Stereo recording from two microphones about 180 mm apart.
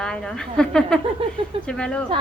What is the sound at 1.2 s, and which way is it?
Speech, 30° right (ahead or behind).